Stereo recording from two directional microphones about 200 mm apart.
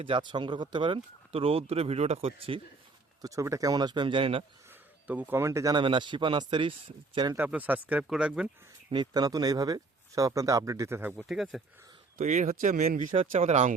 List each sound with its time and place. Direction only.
0.0 s speech: 25° right (ahead or behind)
3.2 s speech: 15° right (ahead or behind)
5.0 s speech: 10° right (ahead or behind)
7.3 s speech: 10° right (ahead or behind)
8.9 s speech: 20° right (ahead or behind); by 11.6 s centre (ahead or behind)
12.1 s speech: 40° right (ahead or behind)